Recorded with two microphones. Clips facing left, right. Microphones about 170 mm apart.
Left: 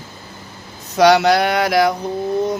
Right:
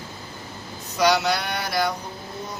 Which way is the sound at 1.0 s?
70° left (ahead or behind).